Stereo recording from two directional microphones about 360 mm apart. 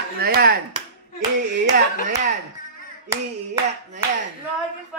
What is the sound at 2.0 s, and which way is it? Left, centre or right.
Speech, centre.